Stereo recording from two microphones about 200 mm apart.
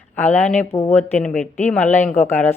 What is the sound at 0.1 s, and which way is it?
Speech, 10° left (ahead or behind).